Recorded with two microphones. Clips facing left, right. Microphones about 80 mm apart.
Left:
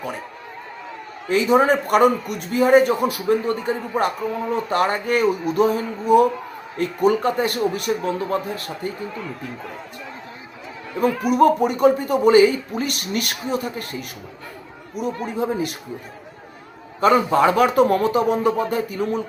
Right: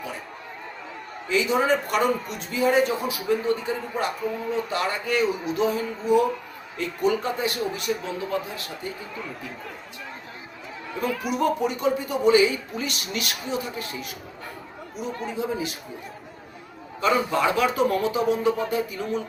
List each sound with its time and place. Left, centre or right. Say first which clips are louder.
1.3 s a man's voice: left 5 dB; left
11.0 s a man's voice: left 8 dB; left
17.0 s a man's voice: left 6 dB; left